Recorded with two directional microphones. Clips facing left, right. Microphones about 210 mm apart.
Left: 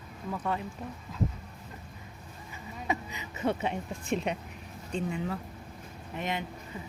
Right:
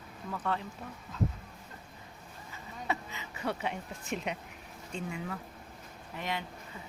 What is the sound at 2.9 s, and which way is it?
A woman's voice, 15° left (ahead or behind).